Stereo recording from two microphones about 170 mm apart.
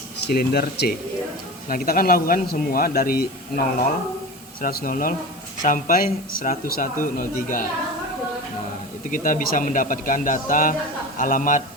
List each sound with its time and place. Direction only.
0.3 s speech: 65° left (ahead or behind)
1.6 s a man's voice: 55° left (ahead or behind)
9.0 s a man's voice: 50° left (ahead or behind)